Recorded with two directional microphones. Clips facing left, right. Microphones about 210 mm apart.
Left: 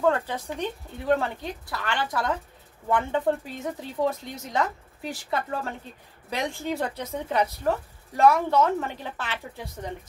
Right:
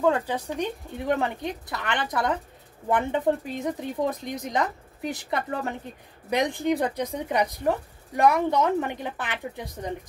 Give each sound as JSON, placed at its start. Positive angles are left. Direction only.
{"t": 0.0, "sound": "speech", "side_deg": -10}